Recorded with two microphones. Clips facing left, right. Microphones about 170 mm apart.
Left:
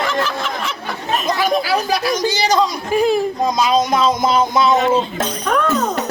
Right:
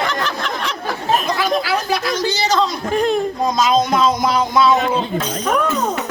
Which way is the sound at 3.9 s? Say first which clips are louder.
Left 1 dB; 20° left (ahead or behind).